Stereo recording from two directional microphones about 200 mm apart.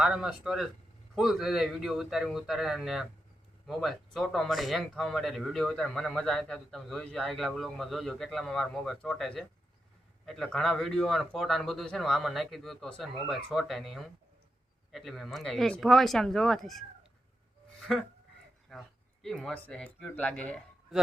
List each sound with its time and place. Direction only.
0.0 s speech: 5° right (ahead or behind)
17.7 s a sound: 5° left (ahead or behind)
18.7 s speech: centre (ahead or behind)